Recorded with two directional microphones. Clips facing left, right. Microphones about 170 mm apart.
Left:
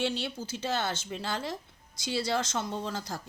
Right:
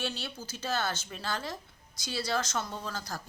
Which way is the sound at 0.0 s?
20° left (ahead or behind).